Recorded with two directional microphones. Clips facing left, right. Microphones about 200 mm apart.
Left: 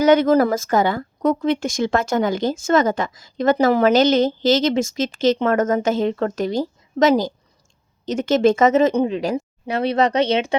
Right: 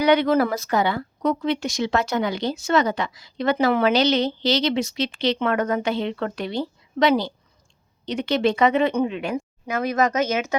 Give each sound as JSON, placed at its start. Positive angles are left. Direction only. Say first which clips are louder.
{"t": 0.0, "sound": "a woman's voice", "louder": "left 4 dB", "side_deg": 45}